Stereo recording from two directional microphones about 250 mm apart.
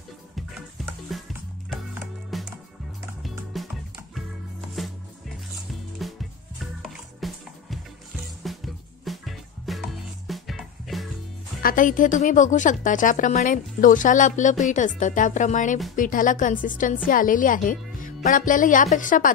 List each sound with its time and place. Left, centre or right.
1.1 s music: centre
2.3 s music: centre
3.5 s music: centre
4.8 s music: centre
6.0 s music: centre
11.6 s a woman's voice: left